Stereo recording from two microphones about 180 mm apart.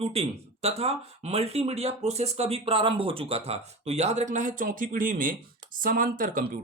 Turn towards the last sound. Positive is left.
turn(degrees=-50)  # may be behind; listen again after turning